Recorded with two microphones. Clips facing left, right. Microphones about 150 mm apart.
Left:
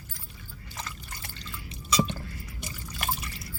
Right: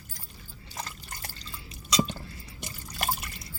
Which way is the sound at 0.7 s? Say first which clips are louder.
Right 1 dB; 40° right (ahead or behind).